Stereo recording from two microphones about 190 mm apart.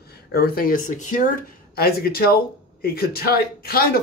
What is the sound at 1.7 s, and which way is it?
Speech, 55° left (ahead or behind).